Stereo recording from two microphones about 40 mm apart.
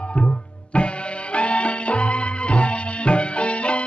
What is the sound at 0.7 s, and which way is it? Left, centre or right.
Music, left.